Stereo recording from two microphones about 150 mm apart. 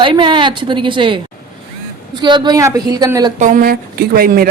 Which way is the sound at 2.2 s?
30° right (ahead or behind).